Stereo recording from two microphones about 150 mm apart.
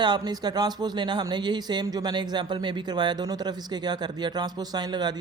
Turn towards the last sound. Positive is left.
turn(degrees=-30)  # may be behind; listen again after turning